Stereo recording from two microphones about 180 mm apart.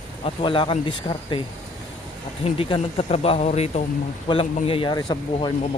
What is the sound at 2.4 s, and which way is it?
Speech, 35° left (ahead or behind).